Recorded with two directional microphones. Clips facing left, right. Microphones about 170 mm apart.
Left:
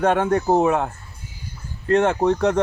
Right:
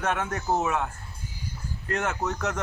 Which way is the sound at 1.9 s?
30° left (ahead or behind).